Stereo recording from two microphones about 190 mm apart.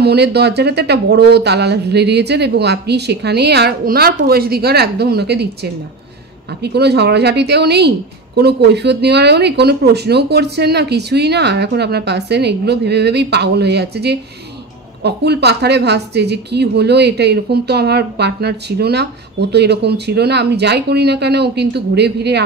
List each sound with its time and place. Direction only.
0.0 s a woman's voice: 60° right (ahead or behind)